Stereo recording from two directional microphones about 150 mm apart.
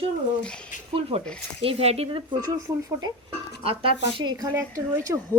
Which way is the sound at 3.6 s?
35° right (ahead or behind).